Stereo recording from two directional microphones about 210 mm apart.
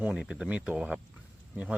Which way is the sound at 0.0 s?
5° right (ahead or behind).